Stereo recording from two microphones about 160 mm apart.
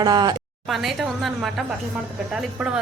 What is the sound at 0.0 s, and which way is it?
Speech, 25° right (ahead or behind).